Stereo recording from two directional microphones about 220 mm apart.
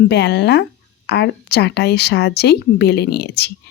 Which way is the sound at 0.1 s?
50° left (ahead or behind).